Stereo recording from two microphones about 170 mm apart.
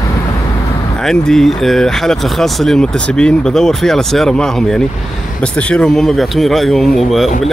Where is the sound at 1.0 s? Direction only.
Centre (ahead or behind).